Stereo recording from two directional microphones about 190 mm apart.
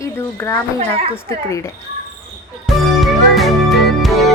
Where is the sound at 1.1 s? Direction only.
15° left (ahead or behind).